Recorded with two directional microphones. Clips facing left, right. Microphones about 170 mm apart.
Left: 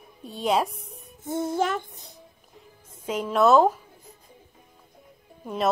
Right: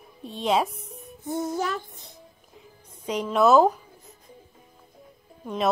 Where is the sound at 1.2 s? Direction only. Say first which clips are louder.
Left 1 dB; 25° left (ahead or behind).